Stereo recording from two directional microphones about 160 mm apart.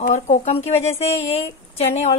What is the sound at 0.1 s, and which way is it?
A woman's voice, 45° left (ahead or behind).